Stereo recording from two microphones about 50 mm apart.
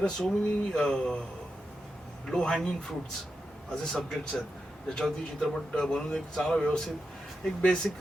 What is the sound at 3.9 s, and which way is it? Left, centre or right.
A man's voice, centre.